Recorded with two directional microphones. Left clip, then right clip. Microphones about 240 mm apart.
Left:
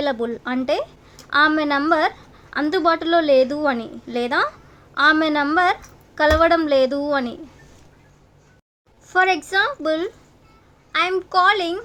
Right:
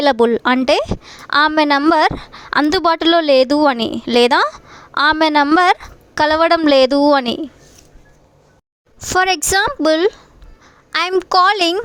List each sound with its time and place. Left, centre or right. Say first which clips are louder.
0.0 s a woman's voice: right 10 dB; right
9.0 s a woman's voice: right 3 dB; right